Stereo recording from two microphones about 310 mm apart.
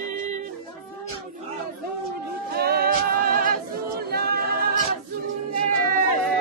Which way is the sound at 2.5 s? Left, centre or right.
Right.